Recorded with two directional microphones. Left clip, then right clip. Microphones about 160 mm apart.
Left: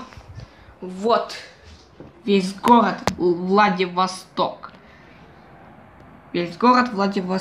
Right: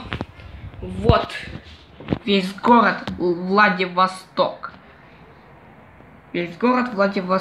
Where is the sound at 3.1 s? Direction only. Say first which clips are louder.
Left 1 dB; 15° right (ahead or behind).